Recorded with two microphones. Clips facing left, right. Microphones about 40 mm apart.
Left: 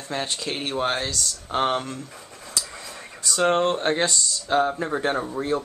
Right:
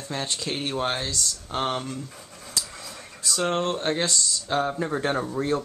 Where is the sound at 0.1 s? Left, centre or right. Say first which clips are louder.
Left 2 dB; centre.